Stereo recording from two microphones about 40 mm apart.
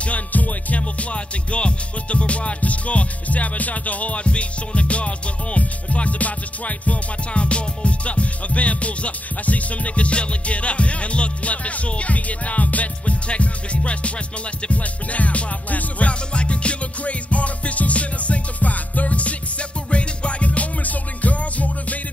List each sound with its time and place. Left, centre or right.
0.0 s music: left